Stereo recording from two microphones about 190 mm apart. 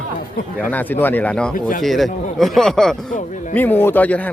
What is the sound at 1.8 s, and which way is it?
Speech, centre (ahead or behind).